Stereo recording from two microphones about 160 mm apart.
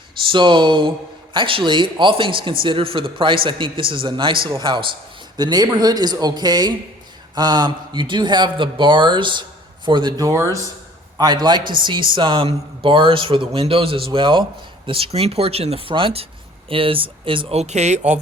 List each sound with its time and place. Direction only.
0.3 s speech: 30° right (ahead or behind); by 18.2 s 45° right (ahead or behind)